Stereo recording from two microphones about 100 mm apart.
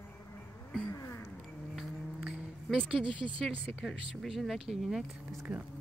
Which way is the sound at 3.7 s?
5° right (ahead or behind).